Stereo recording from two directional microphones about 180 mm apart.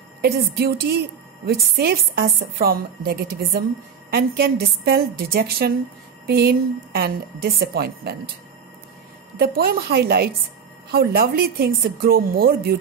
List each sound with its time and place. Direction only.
0.2 s a woman's voice: 60° right (ahead or behind)
9.4 s a woman's voice: 55° right (ahead or behind)